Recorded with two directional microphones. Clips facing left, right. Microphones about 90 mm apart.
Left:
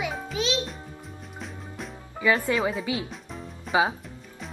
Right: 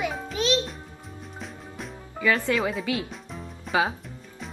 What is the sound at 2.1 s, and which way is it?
Speech, 10° left (ahead or behind).